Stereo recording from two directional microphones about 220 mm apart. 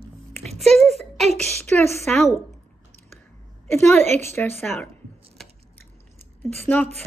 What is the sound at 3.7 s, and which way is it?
A woman's voice, 10° left (ahead or behind).